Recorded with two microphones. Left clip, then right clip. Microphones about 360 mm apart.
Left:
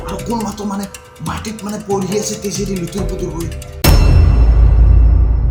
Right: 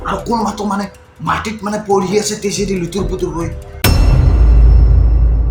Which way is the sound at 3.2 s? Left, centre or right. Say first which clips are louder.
Right 4 dB; left.